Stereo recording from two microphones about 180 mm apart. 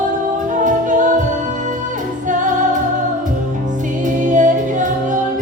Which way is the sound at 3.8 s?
45° right (ahead or behind).